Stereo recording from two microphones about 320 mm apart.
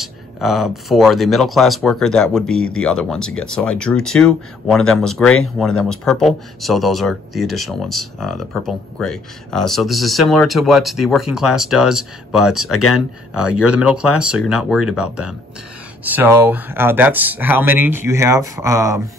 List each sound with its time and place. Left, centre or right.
0.0 s speech: centre
2.4 s speech: left
2.7 s speech: centre
12.7 s speech: left
14.1 s speech: left
14.4 s speech: centre
14.8 s speech: left
16.0 s speech: centre